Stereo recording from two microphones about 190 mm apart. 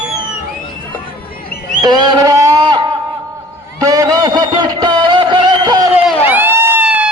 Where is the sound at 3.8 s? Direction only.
20° right (ahead or behind).